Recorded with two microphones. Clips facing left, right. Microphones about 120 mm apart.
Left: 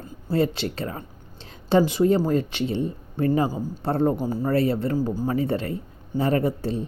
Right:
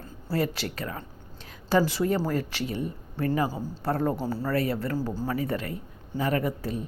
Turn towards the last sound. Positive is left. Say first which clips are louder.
# left 5 dB
turn(degrees=30)  # may be behind; listen again after turning